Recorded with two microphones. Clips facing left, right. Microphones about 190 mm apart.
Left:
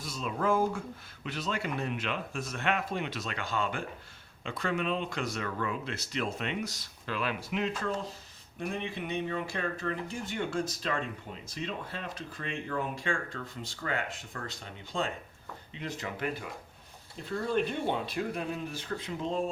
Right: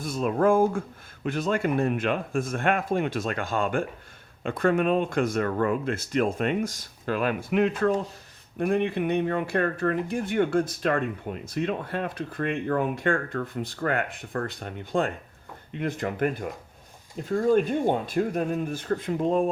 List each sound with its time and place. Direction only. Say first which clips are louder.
0.0 s speech: right 9 dB; 55° right (ahead or behind)